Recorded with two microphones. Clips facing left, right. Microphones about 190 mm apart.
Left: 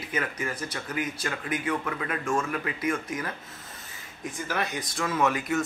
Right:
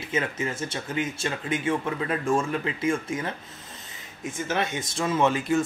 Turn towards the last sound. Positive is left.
turn(degrees=-30)  # may be behind; listen again after turning